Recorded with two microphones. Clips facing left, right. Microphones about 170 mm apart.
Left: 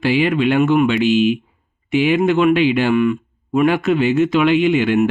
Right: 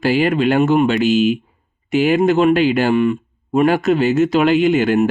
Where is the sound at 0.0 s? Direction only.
40° right (ahead or behind).